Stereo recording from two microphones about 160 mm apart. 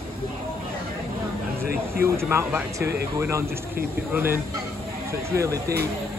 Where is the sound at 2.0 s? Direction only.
15° right (ahead or behind).